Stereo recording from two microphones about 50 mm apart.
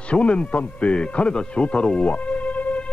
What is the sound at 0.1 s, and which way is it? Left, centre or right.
Speech, left.